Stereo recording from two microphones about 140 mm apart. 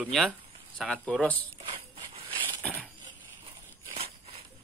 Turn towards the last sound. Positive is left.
turn(degrees=-45)  # may be behind; listen again after turning